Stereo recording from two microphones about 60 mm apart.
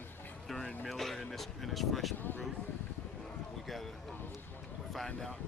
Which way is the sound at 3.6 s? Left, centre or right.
Centre.